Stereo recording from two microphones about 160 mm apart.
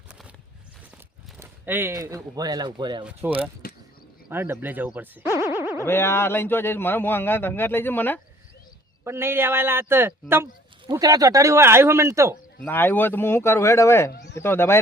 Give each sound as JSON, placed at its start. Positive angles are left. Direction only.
{"t": 1.4, "sound": "speech", "side_deg": -15}
{"t": 3.0, "sound": "a man's voice", "side_deg": -10}
{"t": 3.6, "sound": "a sound", "side_deg": 65}
{"t": 4.3, "sound": "a man's voice", "side_deg": -15}
{"t": 5.5, "sound": "boing", "side_deg": -15}
{"t": 5.8, "sound": "speech", "side_deg": 15}
{"t": 9.0, "sound": "a man's voice", "side_deg": -15}
{"t": 12.6, "sound": "speech", "side_deg": 10}
{"t": 14.1, "sound": "speech", "side_deg": 90}
{"t": 14.3, "sound": "speech", "side_deg": 15}